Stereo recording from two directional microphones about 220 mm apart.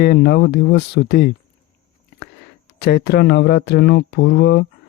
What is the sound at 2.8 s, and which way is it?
Speech, 45° left (ahead or behind).